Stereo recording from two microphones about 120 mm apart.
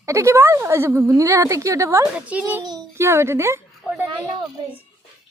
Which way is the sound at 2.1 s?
10° right (ahead or behind).